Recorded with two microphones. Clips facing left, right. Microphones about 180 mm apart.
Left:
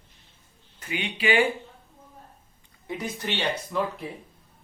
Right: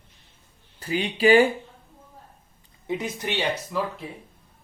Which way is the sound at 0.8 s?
35° right (ahead or behind).